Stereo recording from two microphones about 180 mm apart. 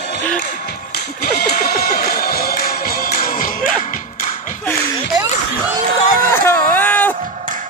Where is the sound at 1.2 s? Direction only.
60° left (ahead or behind).